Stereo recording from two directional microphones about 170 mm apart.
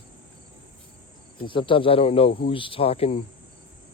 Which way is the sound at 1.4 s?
30° left (ahead or behind).